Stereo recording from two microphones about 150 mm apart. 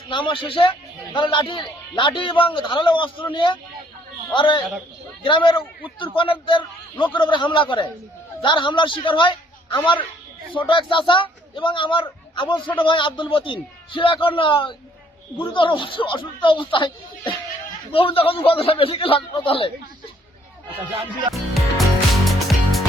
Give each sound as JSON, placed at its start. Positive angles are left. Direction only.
{"t": 0.1, "sound": "a man's voice", "side_deg": 35}
{"t": 21.5, "sound": "music", "side_deg": 0}